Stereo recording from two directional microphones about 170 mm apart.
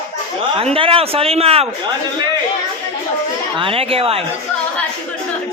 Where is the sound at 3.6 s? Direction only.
35° right (ahead or behind).